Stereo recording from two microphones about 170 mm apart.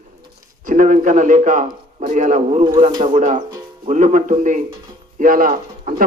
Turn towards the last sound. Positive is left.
turn(degrees=-55)  # may be behind; listen again after turning